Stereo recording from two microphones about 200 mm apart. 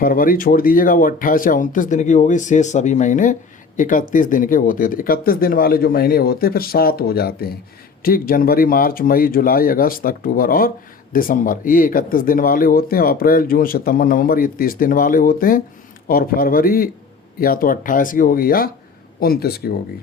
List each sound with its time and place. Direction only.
0.0 s speech: 45° left (ahead or behind)